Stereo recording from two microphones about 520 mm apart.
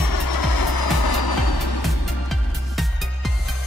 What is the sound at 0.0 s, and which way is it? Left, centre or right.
Music, left.